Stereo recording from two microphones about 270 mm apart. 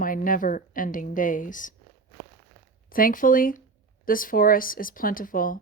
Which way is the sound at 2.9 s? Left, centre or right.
Left.